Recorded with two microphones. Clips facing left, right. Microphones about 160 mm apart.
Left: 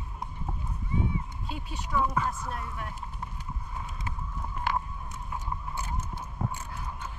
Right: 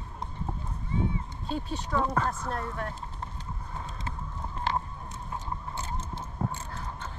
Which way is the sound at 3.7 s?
30° right (ahead or behind).